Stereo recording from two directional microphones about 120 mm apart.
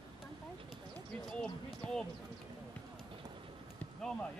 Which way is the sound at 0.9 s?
5° left (ahead or behind).